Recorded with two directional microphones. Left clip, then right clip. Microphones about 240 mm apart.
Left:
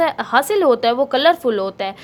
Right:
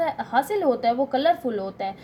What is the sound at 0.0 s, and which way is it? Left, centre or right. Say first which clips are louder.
A woman's voice: left 7 dB; left.